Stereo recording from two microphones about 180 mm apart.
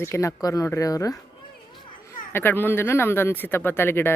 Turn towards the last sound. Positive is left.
turn(degrees=10)  # may be behind; listen again after turning